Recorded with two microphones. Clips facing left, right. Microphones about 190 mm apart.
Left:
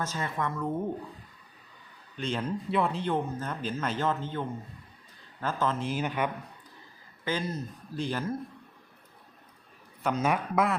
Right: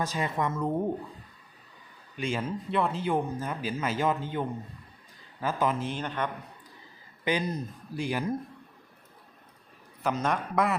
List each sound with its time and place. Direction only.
0.0 s speech: 15° right (ahead or behind)
2.1 s speech: 10° right (ahead or behind)
5.8 s speech: 5° left (ahead or behind)
7.3 s speech: 15° right (ahead or behind)
10.0 s speech: centre (ahead or behind)